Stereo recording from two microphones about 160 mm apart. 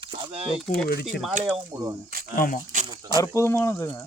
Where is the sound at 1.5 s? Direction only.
20° right (ahead or behind).